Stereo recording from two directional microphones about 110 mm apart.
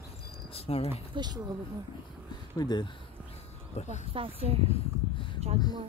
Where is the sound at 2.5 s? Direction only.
40° left (ahead or behind).